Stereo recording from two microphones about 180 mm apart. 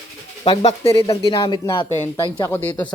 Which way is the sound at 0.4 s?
30° left (ahead or behind).